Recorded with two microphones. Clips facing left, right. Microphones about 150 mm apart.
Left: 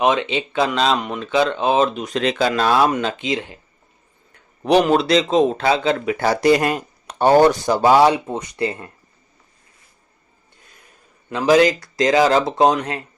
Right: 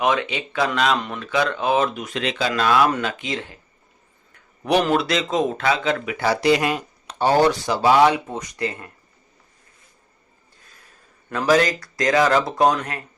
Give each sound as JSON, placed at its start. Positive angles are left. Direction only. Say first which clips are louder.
{"t": 0.0, "sound": "speech", "louder": "left 3 dB", "side_deg": 25}
{"t": 0.9, "sound": "speech", "louder": "left 3 dB", "side_deg": 15}
{"t": 1.2, "sound": "speech", "louder": "left 4 dB", "side_deg": 25}
{"t": 2.5, "sound": "speech", "louder": "right 1 dB", "side_deg": 35}
{"t": 4.8, "sound": "speech", "louder": "left 5 dB", "side_deg": 25}
{"t": 6.1, "sound": "speech", "louder": "left 2 dB", "side_deg": 45}
{"t": 11.3, "sound": "speech", "louder": "left 4 dB", "side_deg": 20}